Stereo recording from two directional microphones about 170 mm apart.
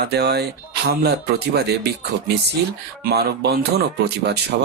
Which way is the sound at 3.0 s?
70° right (ahead or behind).